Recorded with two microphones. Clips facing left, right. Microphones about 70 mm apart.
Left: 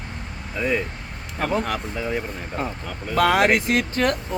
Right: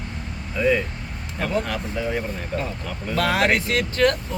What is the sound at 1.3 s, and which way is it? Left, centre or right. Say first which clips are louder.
Speech: left 1 dB; left.